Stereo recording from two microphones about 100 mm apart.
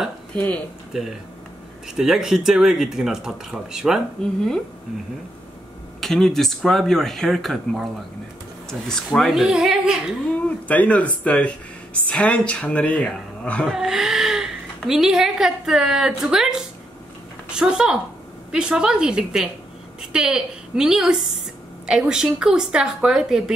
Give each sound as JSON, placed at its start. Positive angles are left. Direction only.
{"t": 0.3, "sound": "speech", "side_deg": 15}
{"t": 2.0, "sound": "speech", "side_deg": -5}
{"t": 5.9, "sound": "speech", "side_deg": 5}
{"t": 8.6, "sound": "speech", "side_deg": 5}
{"t": 10.7, "sound": "a woman's voice", "side_deg": 15}
{"t": 13.7, "sound": "a woman's voice", "side_deg": -5}